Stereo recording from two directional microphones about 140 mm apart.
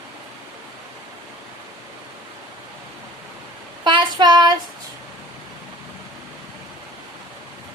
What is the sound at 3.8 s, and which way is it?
Child singing, 35° right (ahead or behind).